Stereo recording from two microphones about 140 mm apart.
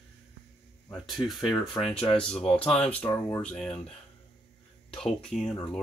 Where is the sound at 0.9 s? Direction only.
Centre (ahead or behind).